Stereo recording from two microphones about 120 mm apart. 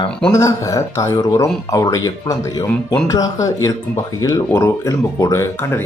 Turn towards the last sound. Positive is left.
turn(degrees=20)  # may be behind; listen again after turning